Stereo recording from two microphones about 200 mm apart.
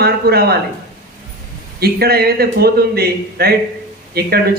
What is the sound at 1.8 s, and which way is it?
Speech, 50° right (ahead or behind).